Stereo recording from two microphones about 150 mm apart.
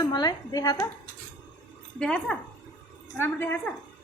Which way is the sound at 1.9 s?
5° left (ahead or behind).